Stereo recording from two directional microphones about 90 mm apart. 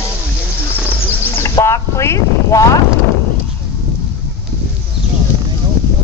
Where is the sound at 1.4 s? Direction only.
35° left (ahead or behind).